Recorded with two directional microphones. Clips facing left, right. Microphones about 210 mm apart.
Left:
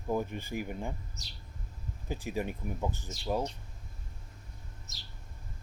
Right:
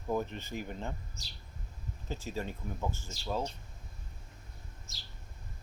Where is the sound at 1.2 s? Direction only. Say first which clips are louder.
Left 1 dB; 30° right (ahead or behind).